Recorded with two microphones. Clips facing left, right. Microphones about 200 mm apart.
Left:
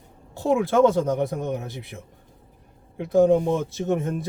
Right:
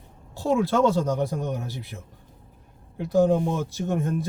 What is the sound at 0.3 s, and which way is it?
Speech, 20° left (ahead or behind).